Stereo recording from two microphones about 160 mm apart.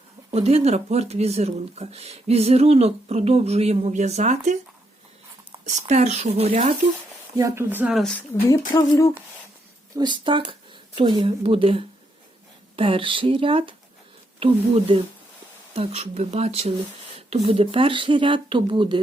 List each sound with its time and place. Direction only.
0.3 s speech: 40° right (ahead or behind)
5.5 s a sound: 45° right (ahead or behind)
5.9 s speech: 45° right (ahead or behind)
7.3 s speech: 15° right (ahead or behind)
8.7 s a sound: 20° left (ahead or behind)
9.9 s speech: 25° right (ahead or behind)